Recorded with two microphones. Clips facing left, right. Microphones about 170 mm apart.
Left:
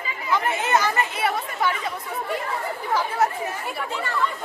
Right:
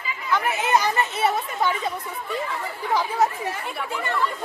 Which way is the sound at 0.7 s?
15° right (ahead or behind).